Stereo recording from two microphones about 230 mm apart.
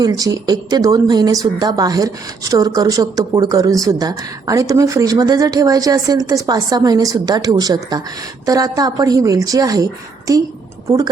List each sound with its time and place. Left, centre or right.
0.0 s a woman's voice: centre